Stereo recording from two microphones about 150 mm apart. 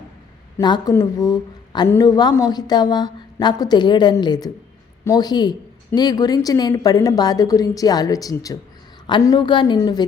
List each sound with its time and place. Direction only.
0.6 s a woman's voice: 30° left (ahead or behind)